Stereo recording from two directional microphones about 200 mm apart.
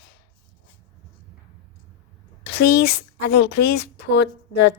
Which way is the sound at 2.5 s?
55° left (ahead or behind).